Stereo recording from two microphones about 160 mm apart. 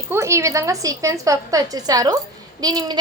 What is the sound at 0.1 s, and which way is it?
A woman's voice, 20° right (ahead or behind).